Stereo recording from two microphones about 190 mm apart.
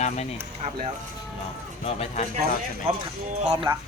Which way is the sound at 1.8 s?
30° left (ahead or behind).